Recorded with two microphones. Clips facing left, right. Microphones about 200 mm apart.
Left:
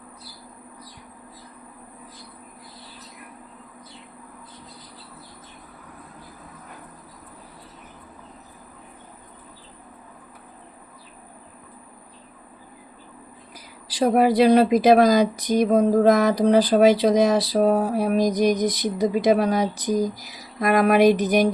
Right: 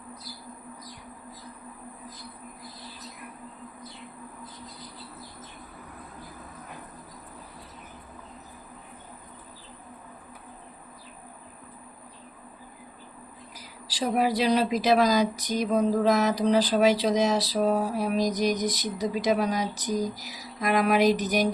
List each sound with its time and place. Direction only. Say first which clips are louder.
13.9 s speech: left 7 dB; 55° left (ahead or behind)